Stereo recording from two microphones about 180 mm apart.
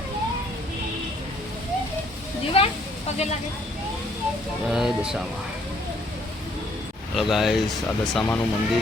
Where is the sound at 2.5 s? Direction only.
30° left (ahead or behind).